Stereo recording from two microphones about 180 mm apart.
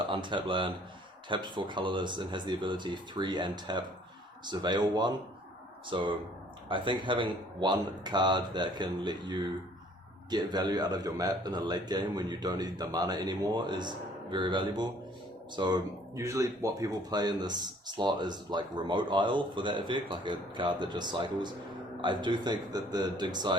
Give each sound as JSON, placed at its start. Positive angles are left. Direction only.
{"t": 0.1, "sound": "speech", "side_deg": -25}